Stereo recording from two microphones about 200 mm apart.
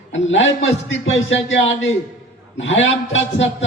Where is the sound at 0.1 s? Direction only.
70° left (ahead or behind).